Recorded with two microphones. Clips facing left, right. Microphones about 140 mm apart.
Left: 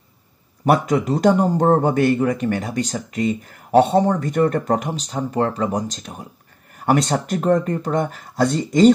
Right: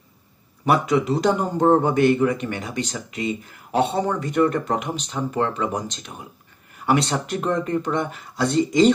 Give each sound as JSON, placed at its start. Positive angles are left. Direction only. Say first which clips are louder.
{"t": 0.7, "sound": "a man's voice", "louder": "left 2 dB", "side_deg": 45}